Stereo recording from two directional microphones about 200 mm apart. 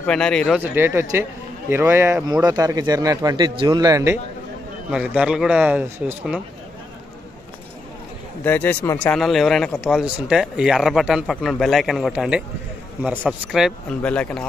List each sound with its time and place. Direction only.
0.0 s speech: 5° left (ahead or behind)
0.6 s a man's voice: 10° right (ahead or behind)
8.5 s speech: 10° left (ahead or behind)